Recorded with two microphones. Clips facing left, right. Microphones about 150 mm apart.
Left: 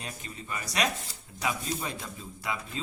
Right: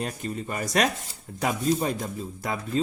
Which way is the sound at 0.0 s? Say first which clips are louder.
Right 11 dB; 50° right (ahead or behind).